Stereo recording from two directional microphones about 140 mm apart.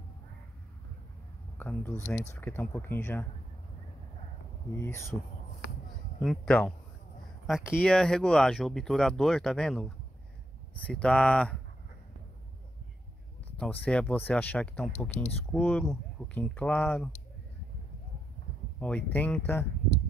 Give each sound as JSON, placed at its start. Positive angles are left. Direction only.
{"t": 1.6, "sound": "speech", "side_deg": 10}
{"t": 4.7, "sound": "speech", "side_deg": 20}
{"t": 6.2, "sound": "speech", "side_deg": 5}
{"t": 13.6, "sound": "speech", "side_deg": 10}
{"t": 18.8, "sound": "speech", "side_deg": 10}